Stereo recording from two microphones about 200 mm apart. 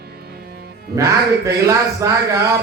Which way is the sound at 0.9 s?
15° right (ahead or behind).